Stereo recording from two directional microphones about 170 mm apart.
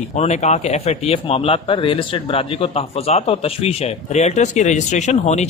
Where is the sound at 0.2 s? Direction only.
40° left (ahead or behind).